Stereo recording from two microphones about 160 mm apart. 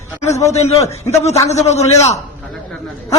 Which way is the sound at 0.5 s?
40° left (ahead or behind).